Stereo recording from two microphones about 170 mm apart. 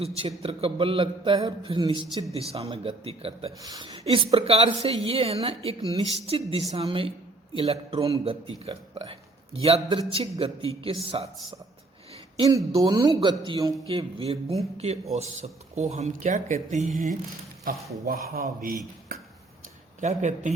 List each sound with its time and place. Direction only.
0.2 s a man's voice: 35° right (ahead or behind)
3.6 s a man's voice: 20° right (ahead or behind)
3.8 s a man's voice: 35° right (ahead or behind)
12.4 s a man's voice: 20° right (ahead or behind); by 18.8 s 55° right (ahead or behind)
20.0 s speech: 45° right (ahead or behind)